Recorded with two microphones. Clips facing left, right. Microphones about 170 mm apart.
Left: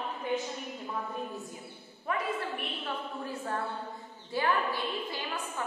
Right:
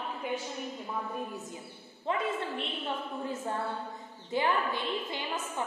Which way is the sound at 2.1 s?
25° right (ahead or behind).